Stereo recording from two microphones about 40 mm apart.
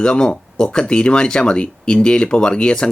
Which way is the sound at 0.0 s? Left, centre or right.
Left.